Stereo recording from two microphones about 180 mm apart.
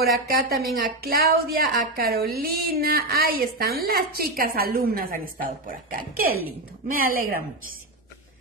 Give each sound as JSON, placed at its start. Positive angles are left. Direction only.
{"t": 0.3, "sound": "a woman's voice", "side_deg": -60}